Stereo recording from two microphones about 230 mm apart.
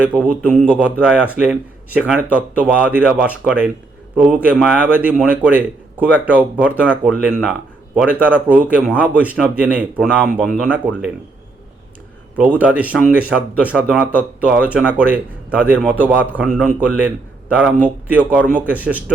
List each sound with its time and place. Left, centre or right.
0.4 s speech: centre
0.7 s speech: centre
12.4 s speech: centre